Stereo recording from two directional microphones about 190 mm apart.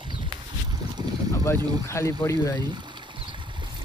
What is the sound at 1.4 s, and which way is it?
Speech, 15° left (ahead or behind).